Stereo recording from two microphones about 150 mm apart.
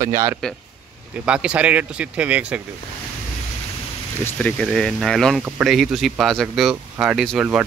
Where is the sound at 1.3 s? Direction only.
5° right (ahead or behind).